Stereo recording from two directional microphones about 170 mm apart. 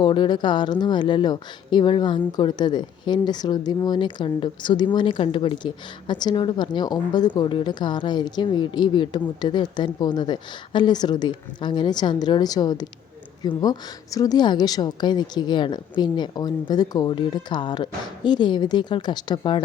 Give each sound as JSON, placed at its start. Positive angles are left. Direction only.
{"t": 0.0, "sound": "speech", "side_deg": 25}